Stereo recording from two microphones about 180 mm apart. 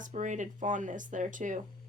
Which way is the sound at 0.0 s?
45° right (ahead or behind).